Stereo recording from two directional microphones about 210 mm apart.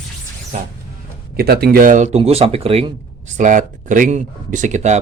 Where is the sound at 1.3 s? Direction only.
50° right (ahead or behind).